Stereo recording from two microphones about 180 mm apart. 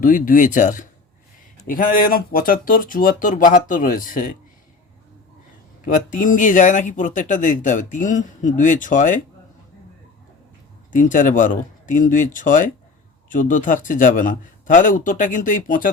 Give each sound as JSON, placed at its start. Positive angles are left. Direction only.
{"t": 0.0, "sound": "speech", "side_deg": 50}
{"t": 5.8, "sound": "speech", "side_deg": 50}
{"t": 10.9, "sound": "speech", "side_deg": 45}